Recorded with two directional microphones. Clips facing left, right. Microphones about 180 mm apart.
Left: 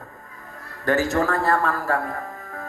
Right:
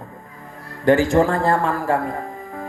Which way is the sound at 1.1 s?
20° right (ahead or behind).